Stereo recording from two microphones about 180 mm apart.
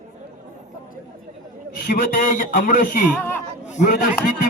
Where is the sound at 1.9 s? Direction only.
55° left (ahead or behind).